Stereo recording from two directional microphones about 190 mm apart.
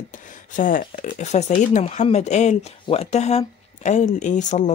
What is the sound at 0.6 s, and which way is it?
Speech, 45° left (ahead or behind).